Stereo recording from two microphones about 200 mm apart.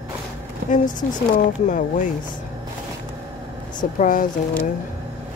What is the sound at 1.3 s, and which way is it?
Speech, 40° left (ahead or behind).